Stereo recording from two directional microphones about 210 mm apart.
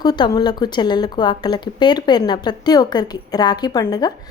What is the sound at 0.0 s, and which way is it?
A woman's voice, 20° left (ahead or behind).